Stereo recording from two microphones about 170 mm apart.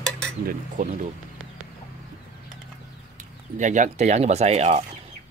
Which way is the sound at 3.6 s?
45° right (ahead or behind).